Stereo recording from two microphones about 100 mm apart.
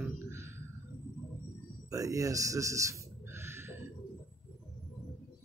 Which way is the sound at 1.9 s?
35° right (ahead or behind).